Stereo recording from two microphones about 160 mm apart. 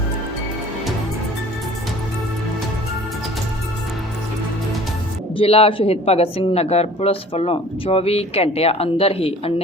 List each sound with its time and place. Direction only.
5.4 s speech: 35° left (ahead or behind)